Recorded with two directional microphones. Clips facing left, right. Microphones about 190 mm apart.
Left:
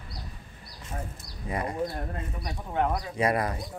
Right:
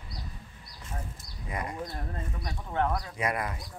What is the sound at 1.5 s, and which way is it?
Speech, 30° left (ahead or behind).